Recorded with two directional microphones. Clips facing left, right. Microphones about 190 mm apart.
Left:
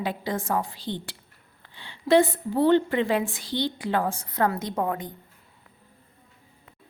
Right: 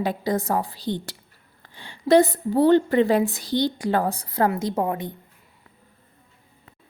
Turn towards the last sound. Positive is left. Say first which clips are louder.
# right 3 dB
turn(degrees=-25)  # may be behind; listen again after turning